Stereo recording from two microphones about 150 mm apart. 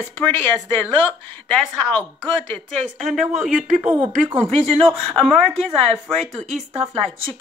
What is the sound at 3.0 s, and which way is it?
Speech, centre (ahead or behind).